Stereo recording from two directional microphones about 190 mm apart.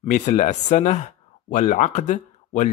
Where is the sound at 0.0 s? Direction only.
35° left (ahead or behind).